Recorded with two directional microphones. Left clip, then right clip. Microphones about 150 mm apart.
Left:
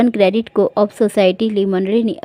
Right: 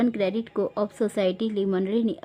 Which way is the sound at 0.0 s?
50° left (ahead or behind).